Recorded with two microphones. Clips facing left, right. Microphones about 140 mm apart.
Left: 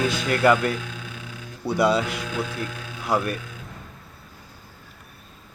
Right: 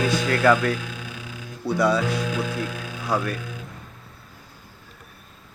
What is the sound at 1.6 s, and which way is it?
Speech, 20° left (ahead or behind).